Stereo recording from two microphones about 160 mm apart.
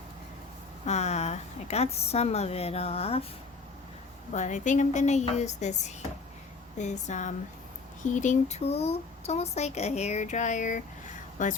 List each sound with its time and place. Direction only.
0.9 s a woman's voice: 45° left (ahead or behind)
4.3 s speech: 50° left (ahead or behind)